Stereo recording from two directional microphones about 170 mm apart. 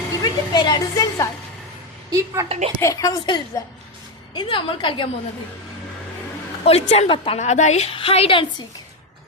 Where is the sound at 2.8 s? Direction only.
20° left (ahead or behind).